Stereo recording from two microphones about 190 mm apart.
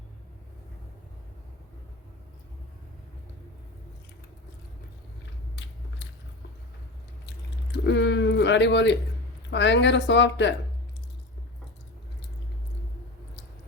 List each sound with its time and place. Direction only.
7.7 s a woman's voice: 65° left (ahead or behind)